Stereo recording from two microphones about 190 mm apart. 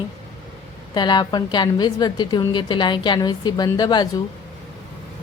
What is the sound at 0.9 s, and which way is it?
A woman's voice, 20° left (ahead or behind).